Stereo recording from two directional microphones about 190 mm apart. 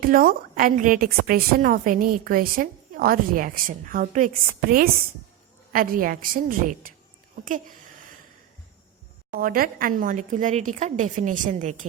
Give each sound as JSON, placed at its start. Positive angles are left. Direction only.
{"t": 0.0, "sound": "a woman's voice", "side_deg": -50}
{"t": 9.3, "sound": "a woman's voice", "side_deg": -50}